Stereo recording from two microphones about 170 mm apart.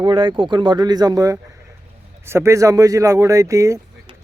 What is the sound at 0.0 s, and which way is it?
Speech, 30° right (ahead or behind).